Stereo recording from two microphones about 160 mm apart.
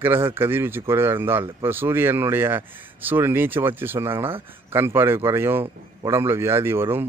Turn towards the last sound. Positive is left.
turn(degrees=-15)  # may be behind; listen again after turning